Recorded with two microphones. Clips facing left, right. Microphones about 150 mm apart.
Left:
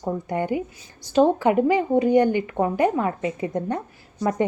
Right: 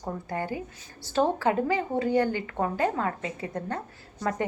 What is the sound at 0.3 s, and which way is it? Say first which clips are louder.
A woman's voice: left 6 dB; 20° left (ahead or behind).